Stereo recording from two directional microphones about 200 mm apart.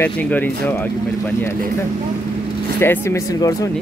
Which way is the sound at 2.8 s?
10° left (ahead or behind).